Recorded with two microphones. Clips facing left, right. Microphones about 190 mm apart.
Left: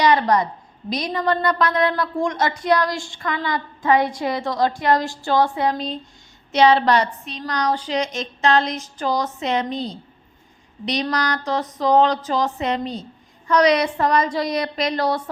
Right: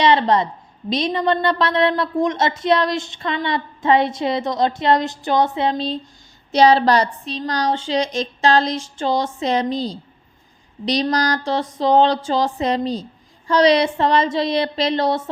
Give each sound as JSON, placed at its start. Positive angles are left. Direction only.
{"t": 0.0, "sound": "a woman's voice", "side_deg": -25}